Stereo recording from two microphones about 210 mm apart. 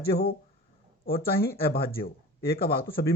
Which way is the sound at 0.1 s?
50° left (ahead or behind).